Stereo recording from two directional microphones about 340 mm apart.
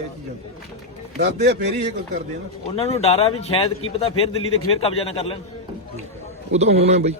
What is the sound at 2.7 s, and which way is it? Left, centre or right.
Speech, centre.